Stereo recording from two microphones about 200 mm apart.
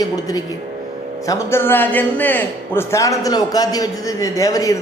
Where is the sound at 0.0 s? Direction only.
20° left (ahead or behind).